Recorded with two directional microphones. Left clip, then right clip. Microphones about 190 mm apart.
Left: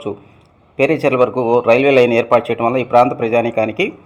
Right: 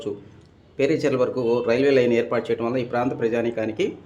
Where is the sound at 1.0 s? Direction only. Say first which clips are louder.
Left 7 dB; 15° left (ahead or behind).